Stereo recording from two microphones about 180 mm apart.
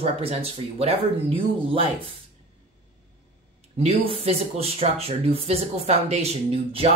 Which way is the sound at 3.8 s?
35° right (ahead or behind).